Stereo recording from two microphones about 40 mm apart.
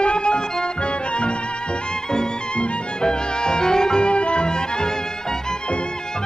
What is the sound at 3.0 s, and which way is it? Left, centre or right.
Music, centre.